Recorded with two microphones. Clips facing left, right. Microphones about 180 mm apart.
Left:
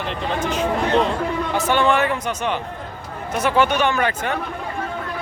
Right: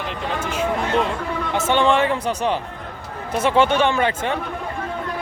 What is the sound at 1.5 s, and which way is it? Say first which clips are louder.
Speech: right 1 dB; 25° right (ahead or behind).